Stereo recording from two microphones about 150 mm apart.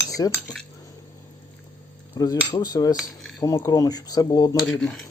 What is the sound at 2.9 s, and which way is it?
Cutlery, 5° left (ahead or behind).